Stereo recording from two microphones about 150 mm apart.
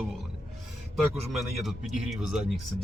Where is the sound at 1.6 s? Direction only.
Centre (ahead or behind).